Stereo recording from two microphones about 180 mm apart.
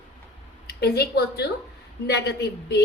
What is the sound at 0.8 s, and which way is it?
A woman's voice, 65° left (ahead or behind).